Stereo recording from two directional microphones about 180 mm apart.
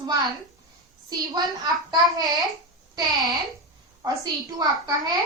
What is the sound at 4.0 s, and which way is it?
A child's voice, 20° right (ahead or behind).